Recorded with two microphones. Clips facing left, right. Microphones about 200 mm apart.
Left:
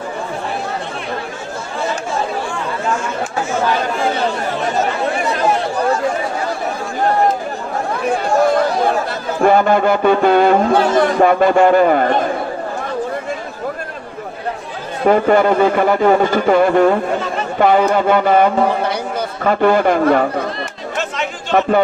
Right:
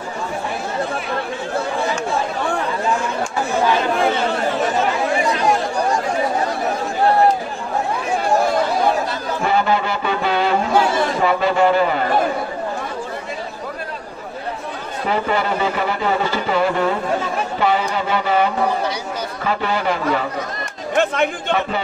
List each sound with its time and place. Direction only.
9.4 s a sound: 50° left (ahead or behind)
15.0 s a man's voice: 50° left (ahead or behind)
20.9 s chatter: 55° right (ahead or behind)
21.5 s a man's voice: 50° left (ahead or behind)